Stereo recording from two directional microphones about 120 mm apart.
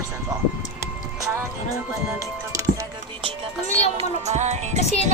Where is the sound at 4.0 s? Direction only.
70° right (ahead or behind).